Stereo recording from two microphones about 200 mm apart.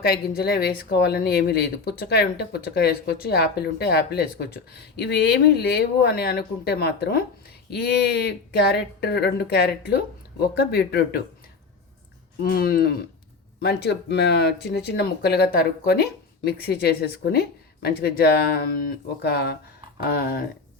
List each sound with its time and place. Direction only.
0.0 s speech: 50° left (ahead or behind)
12.4 s speech: 50° left (ahead or behind)